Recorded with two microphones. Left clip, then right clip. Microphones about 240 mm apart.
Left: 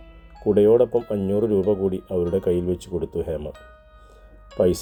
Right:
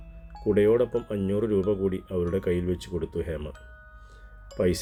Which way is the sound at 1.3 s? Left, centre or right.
Left.